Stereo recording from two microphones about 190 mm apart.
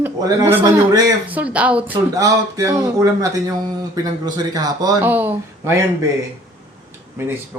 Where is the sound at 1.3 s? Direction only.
5° right (ahead or behind).